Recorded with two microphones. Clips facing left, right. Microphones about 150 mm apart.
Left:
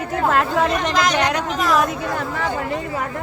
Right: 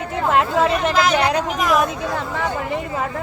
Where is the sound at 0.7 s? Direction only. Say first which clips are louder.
Right 2 dB; 5° right (ahead or behind).